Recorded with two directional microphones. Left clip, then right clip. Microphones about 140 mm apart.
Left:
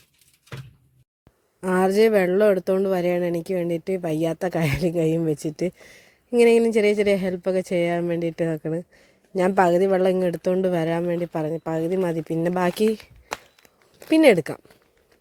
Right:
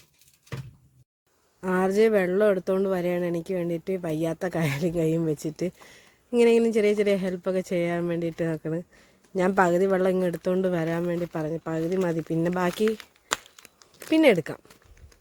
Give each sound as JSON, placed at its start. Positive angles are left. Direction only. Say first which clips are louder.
{"t": 1.6, "sound": "speech", "louder": "left 3 dB", "side_deg": 25}
{"t": 14.1, "sound": "speech", "louder": "left 4 dB", "side_deg": 25}